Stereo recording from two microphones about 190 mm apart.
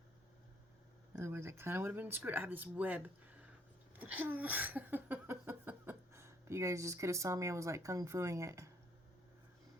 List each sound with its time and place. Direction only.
1.1 s speech: 10° right (ahead or behind)